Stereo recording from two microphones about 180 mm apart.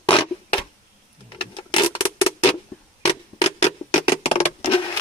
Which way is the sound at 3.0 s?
35° left (ahead or behind).